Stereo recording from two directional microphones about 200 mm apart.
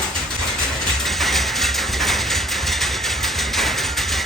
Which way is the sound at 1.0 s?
Centre (ahead or behind).